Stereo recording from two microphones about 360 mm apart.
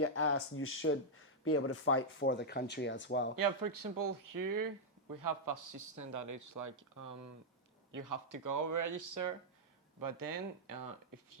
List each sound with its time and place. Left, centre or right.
0.0 s speech: left
3.3 s a man's voice: right